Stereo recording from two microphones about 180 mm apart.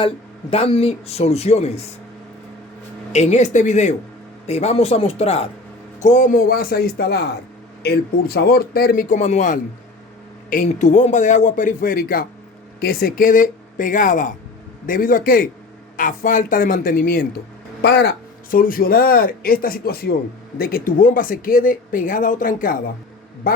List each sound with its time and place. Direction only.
0.5 s speech: 35° left (ahead or behind)
3.1 s speech: 40° left (ahead or behind)
6.0 s a man's voice: 45° left (ahead or behind)
17.8 s speech: 70° left (ahead or behind)
18.5 s a man's voice: 50° left (ahead or behind)